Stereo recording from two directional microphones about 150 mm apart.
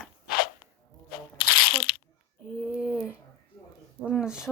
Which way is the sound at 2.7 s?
Centre (ahead or behind).